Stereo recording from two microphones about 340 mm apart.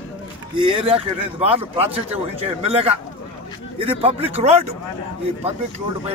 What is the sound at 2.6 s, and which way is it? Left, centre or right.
Speech, centre.